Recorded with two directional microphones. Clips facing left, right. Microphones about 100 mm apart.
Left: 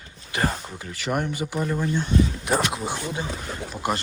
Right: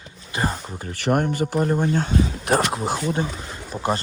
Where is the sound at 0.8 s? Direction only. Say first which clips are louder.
Right 6 dB; 50° right (ahead or behind).